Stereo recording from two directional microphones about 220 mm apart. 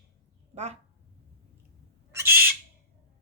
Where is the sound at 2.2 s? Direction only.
45° right (ahead or behind).